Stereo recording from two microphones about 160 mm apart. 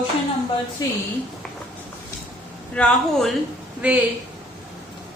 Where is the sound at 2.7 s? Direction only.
5° left (ahead or behind).